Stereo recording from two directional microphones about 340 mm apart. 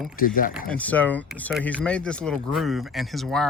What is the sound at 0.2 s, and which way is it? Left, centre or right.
Speech, left.